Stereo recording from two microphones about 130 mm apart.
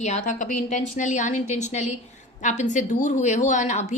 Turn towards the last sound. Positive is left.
turn(degrees=70)  # may be behind; listen again after turning